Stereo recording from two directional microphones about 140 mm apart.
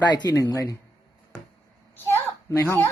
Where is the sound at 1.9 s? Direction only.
15° left (ahead or behind).